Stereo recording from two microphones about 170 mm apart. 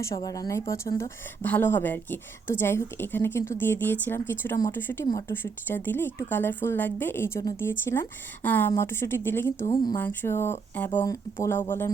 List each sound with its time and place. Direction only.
0.0 s speech: 20° left (ahead or behind)